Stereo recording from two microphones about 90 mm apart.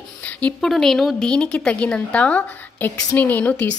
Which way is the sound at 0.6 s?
5° left (ahead or behind).